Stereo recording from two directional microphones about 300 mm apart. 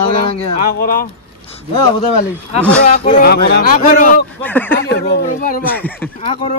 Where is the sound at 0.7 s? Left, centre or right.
Left.